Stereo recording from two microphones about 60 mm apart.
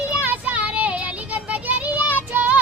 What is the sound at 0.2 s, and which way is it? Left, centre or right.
Child singing, right.